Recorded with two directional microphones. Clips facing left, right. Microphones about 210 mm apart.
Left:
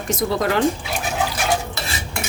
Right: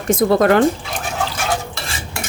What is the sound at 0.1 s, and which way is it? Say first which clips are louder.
Speech: right 7 dB; 55° right (ahead or behind).